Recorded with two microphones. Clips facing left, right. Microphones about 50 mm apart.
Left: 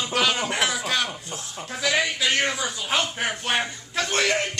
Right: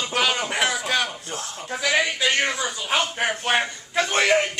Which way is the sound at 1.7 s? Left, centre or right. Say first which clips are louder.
Right 2 dB; centre.